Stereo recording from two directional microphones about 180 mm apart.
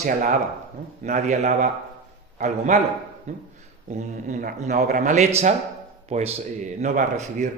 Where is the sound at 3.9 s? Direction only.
45° right (ahead or behind).